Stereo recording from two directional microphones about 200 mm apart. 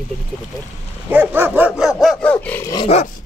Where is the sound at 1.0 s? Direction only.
10° right (ahead or behind); by 2.7 s 10° left (ahead or behind).